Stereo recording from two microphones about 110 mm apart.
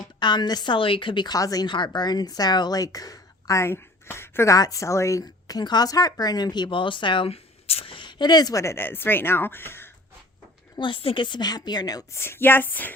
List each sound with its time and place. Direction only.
0.2 s a woman's voice: 45° left (ahead or behind)
7.3 s speech: 65° left (ahead or behind); by 9.9 s 20° left (ahead or behind)
10.8 s a woman's voice: 50° left (ahead or behind)
12.2 s speech: 20° left (ahead or behind)